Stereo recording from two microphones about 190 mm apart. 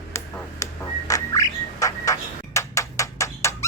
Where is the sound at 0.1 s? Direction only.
15° left (ahead or behind).